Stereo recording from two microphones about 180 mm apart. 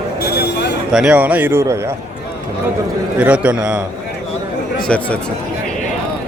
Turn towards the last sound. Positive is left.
turn(degrees=5)  # may be behind; listen again after turning